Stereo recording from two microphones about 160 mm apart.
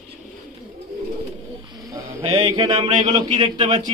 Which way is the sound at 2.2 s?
30° right (ahead or behind).